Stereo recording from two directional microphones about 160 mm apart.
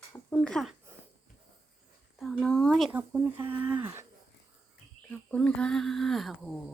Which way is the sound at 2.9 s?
10° right (ahead or behind).